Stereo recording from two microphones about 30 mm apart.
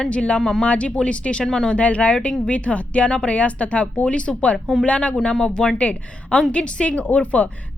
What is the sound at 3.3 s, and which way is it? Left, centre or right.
A woman's voice, left.